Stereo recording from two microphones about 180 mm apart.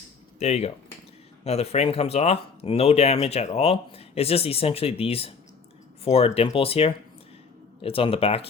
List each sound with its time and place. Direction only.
0.3 s speech: 35° left (ahead or behind)